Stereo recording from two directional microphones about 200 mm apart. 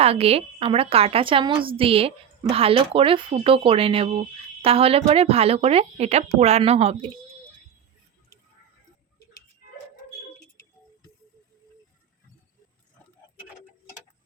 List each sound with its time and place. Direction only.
0.0 s a woman's voice: 30° right (ahead or behind)